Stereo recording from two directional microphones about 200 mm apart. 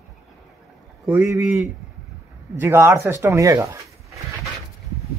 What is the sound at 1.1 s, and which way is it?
A man's voice, 15° right (ahead or behind).